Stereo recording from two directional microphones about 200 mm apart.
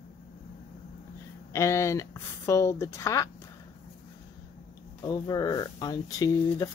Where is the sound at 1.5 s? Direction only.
15° left (ahead or behind).